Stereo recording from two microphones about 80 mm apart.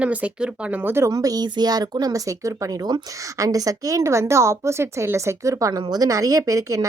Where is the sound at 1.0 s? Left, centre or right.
Right.